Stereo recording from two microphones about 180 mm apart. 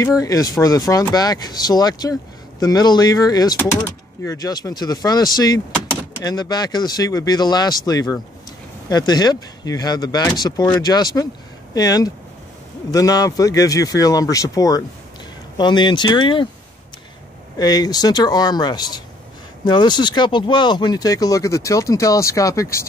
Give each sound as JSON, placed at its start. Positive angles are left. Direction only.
{"t": 0.0, "sound": "speech", "side_deg": 20}
{"t": 3.5, "sound": "speech", "side_deg": 10}
{"t": 17.6, "sound": "speech", "side_deg": 20}